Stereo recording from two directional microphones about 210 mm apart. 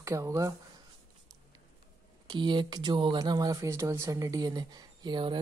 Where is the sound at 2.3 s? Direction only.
20° right (ahead or behind).